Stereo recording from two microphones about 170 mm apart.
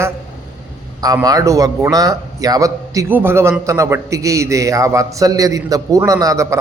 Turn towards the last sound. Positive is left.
turn(degrees=-20)  # may be behind; listen again after turning